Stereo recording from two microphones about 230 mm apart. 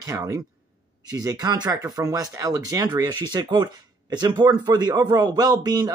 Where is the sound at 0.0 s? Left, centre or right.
Centre.